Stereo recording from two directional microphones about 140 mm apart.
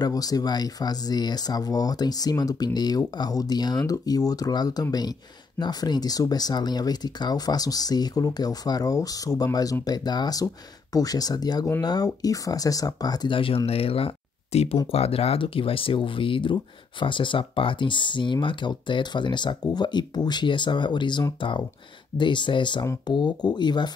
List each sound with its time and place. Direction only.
0.0 s speech: 25° left (ahead or behind)